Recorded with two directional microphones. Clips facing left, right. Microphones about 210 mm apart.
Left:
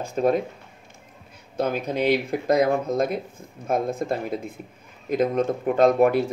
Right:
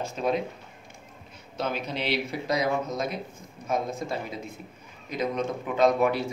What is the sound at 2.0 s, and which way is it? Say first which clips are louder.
Speech: left 7 dB; 45° left (ahead or behind).